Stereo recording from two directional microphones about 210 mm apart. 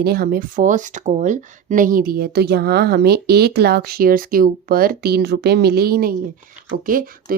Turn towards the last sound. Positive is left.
turn(degrees=-40)  # may be behind; listen again after turning